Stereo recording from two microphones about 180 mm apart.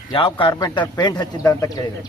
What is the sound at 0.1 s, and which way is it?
A man's voice, 25° left (ahead or behind).